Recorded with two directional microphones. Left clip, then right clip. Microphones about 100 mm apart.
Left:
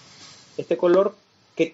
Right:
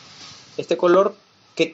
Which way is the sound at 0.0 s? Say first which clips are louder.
Right 5 dB; 35° right (ahead or behind).